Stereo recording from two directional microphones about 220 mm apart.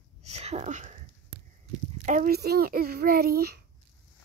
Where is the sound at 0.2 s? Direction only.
30° right (ahead or behind).